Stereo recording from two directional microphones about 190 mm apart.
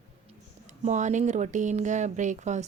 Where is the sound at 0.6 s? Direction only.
40° right (ahead or behind).